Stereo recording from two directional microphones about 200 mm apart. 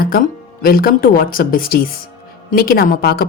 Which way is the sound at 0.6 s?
45° left (ahead or behind).